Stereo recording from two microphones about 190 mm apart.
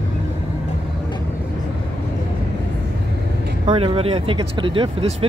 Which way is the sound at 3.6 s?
30° right (ahead or behind).